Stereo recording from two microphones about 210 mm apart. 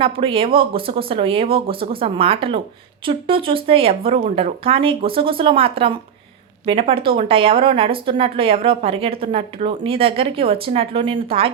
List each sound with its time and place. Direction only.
0.0 s speech: 25° right (ahead or behind)